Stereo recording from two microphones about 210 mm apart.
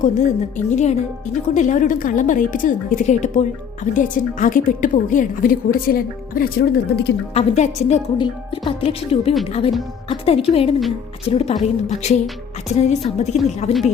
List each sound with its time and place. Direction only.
0.0 s a woman's voice: 35° left (ahead or behind)
7.3 s a woman's voice: 35° left (ahead or behind)